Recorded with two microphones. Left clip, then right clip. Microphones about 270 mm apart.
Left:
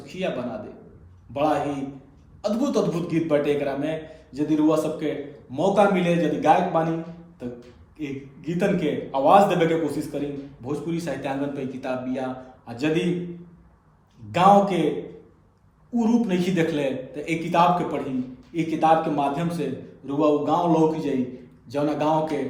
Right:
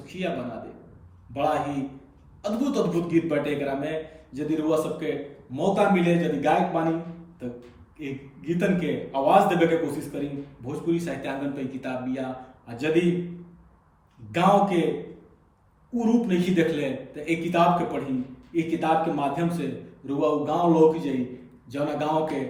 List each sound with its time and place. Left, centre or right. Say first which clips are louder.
0.0 s a sound: left 3 dB; centre
1.3 s a man's voice: left 2 dB; centre
7.9 s a man's voice: left 3 dB; centre
14.3 s a man's voice: left 4 dB; centre
15.9 s a man's voice: left 1 dB; centre